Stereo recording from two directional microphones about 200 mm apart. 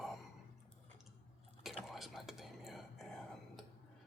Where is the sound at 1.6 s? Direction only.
Centre (ahead or behind).